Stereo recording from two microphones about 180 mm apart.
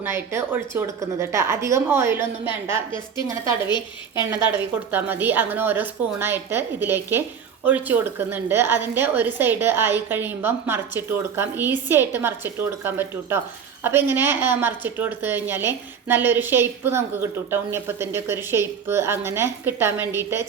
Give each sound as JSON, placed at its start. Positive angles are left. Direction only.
{"t": 0.0, "sound": "a woman's voice", "side_deg": -15}
{"t": 3.7, "sound": "a woman's voice", "side_deg": 25}
{"t": 4.3, "sound": "a woman's voice", "side_deg": -10}